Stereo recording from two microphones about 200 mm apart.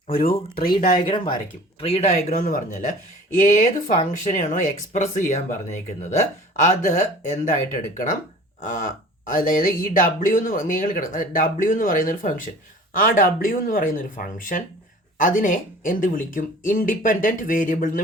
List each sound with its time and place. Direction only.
0.1 s speech: 45° left (ahead or behind)
0.9 s speech: 25° left (ahead or behind)
6.8 s speech: 40° left (ahead or behind)